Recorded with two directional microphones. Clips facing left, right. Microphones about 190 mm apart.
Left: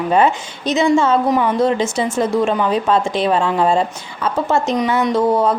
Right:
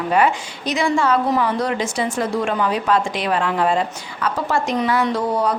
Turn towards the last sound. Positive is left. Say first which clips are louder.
# left 5 dB
turn(degrees=25)  # may be behind; listen again after turning